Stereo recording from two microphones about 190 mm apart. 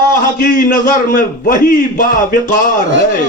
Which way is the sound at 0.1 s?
45° left (ahead or behind).